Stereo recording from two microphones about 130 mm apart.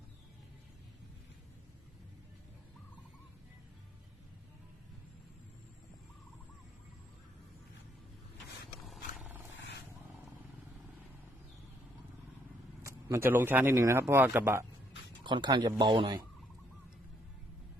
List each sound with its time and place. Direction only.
12.8 s speech: 20° right (ahead or behind)
15.2 s speech: 35° right (ahead or behind)
15.8 s fowl: 35° right (ahead or behind)